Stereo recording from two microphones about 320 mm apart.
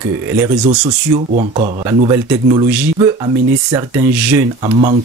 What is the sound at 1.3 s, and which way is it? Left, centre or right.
Speech, centre.